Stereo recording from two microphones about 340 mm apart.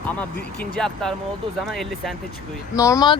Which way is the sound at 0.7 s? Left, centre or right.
Centre.